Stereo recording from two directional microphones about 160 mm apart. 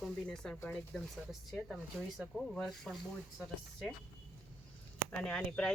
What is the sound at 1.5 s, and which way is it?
Speech, centre (ahead or behind).